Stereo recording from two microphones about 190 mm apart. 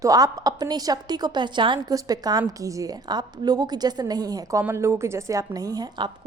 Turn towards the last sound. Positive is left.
turn(degrees=-20)  # may be behind; listen again after turning